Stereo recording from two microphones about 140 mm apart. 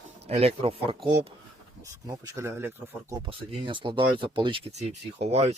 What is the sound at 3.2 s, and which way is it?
Speech, 35° right (ahead or behind).